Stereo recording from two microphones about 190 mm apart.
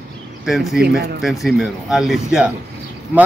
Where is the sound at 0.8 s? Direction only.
55° right (ahead or behind).